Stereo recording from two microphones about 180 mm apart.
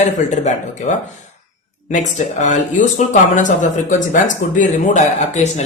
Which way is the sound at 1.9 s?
40° left (ahead or behind).